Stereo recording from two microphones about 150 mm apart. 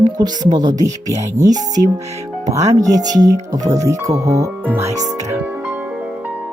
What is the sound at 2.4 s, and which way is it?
Speech, 20° right (ahead or behind).